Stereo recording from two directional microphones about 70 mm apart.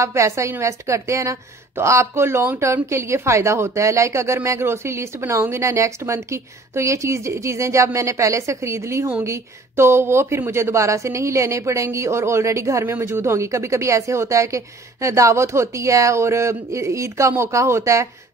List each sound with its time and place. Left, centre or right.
0.0 s speech: right